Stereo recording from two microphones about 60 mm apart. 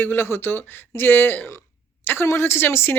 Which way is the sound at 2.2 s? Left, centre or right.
Left.